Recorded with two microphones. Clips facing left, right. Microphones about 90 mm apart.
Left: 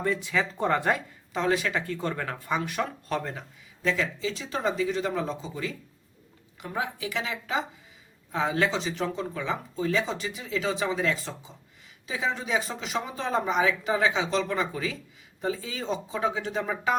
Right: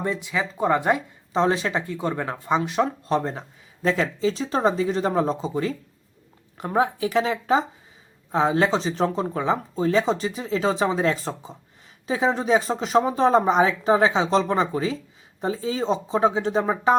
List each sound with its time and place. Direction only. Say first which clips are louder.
0.0 s speech: right 1 dB; 20° right (ahead or behind)
1.3 s speech: right 5 dB; 30° right (ahead or behind)
1.8 s speech: right 4 dB; 15° right (ahead or behind)
3.8 s speech: right 6 dB; 40° right (ahead or behind)